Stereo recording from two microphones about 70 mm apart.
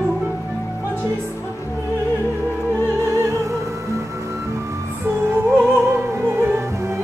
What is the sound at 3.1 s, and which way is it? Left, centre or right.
Music, right.